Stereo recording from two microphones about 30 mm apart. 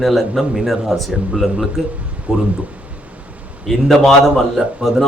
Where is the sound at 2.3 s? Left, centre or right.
Right.